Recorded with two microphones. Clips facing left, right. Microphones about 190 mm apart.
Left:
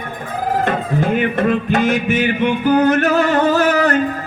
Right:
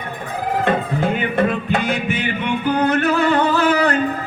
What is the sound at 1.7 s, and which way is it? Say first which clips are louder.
Music: left 5 dB; 40° left (ahead or behind).